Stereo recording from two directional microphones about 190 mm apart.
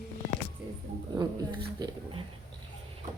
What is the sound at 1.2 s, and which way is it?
Speech, 20° right (ahead or behind).